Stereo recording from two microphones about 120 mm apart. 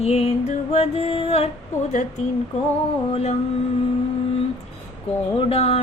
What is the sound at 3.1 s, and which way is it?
Music, 60° left (ahead or behind).